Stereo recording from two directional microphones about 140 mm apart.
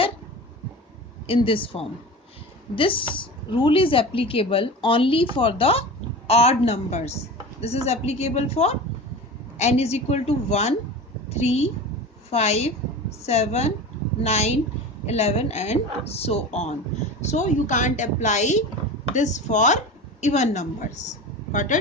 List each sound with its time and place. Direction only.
1.3 s a woman's voice: 40° left (ahead or behind); by 21.8 s 60° left (ahead or behind)